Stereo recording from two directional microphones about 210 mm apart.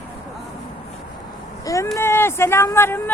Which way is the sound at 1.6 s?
15° left (ahead or behind).